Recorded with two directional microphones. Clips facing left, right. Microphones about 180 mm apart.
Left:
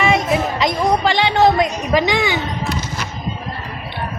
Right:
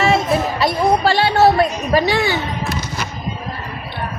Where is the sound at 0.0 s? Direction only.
15° left (ahead or behind).